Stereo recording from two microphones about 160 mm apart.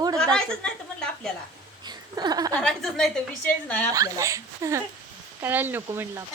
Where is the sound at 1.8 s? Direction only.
25° right (ahead or behind).